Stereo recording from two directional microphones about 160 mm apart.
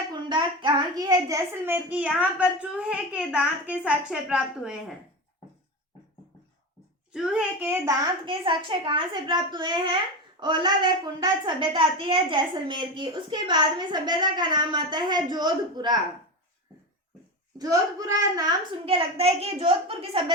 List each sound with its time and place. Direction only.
0.1 s child singing: 30° right (ahead or behind); by 2.0 s 10° right (ahead or behind)
2.1 s a woman's voice: 10° right (ahead or behind)
7.1 s a child's voice: 5° right (ahead or behind)
8.2 s a woman's voice: 30° right (ahead or behind)
17.6 s a woman's voice: 20° right (ahead or behind)
18.9 s a woman's voice: 40° right (ahead or behind)